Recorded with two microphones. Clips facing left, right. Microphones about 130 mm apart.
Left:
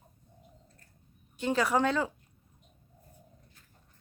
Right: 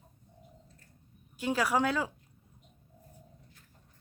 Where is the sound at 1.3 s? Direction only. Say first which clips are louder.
Left 2 dB; 5° right (ahead or behind).